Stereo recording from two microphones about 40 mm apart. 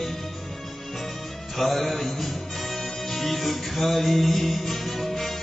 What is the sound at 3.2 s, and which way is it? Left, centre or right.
Music, centre.